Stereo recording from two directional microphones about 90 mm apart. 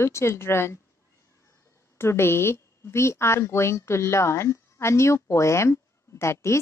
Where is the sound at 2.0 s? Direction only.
30° left (ahead or behind).